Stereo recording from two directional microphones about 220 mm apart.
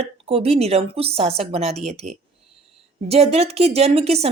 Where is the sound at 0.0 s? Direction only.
25° right (ahead or behind).